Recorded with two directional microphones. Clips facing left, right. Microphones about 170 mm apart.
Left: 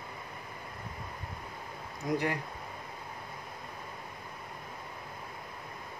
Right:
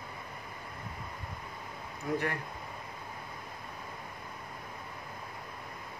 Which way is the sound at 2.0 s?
15° left (ahead or behind).